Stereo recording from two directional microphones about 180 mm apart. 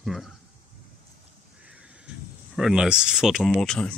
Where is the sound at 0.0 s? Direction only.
Centre (ahead or behind).